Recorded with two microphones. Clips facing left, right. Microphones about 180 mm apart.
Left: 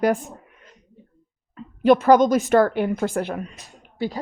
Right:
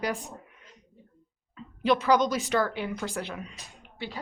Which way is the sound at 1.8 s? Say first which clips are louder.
Left 9 dB; 50° left (ahead or behind).